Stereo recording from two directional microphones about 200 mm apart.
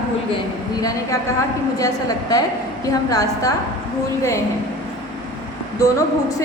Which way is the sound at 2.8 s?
15° left (ahead or behind).